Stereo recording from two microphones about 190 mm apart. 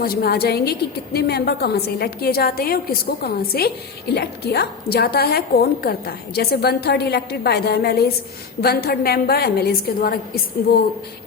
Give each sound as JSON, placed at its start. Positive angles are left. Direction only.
{"t": 0.0, "sound": "a woman's voice", "side_deg": 50}